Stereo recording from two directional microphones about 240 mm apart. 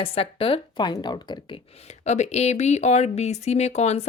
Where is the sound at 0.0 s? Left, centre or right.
Left.